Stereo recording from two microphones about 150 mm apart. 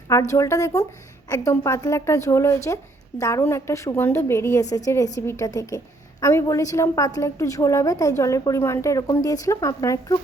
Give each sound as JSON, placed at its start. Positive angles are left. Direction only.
{"t": 0.3, "sound": "a woman's voice", "side_deg": 20}